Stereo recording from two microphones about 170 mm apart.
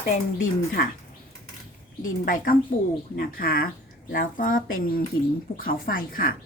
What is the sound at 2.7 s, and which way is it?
A woman's voice, 50° left (ahead or behind).